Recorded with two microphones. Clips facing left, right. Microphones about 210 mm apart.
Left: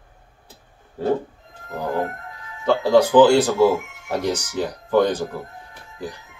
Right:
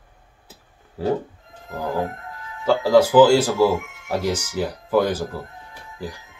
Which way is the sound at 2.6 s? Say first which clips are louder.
Even; 10° right (ahead or behind).